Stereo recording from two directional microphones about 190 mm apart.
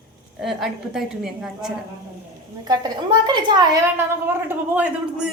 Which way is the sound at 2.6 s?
20° right (ahead or behind).